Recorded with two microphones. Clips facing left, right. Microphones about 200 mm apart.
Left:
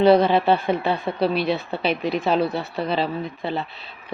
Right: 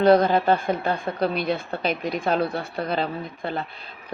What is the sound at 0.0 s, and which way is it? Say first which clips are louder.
Speech: left 1 dB; 5° left (ahead or behind).